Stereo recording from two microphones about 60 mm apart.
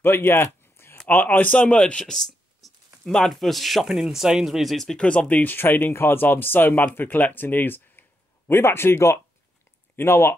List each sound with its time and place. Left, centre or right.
0.0 s a sound: left
1.0 s speech: left; by 4.8 s centre
4.8 s speech: centre
5.3 s speech: left